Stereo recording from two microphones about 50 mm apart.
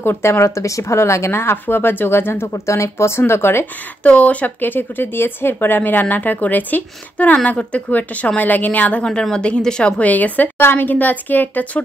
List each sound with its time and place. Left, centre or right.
0.0 s speech: left
4.0 s speech: left
4.6 s speech: left
8.4 s speech: left
9.0 s a woman's voice: centre
10.0 s speech: left
10.6 s speech: left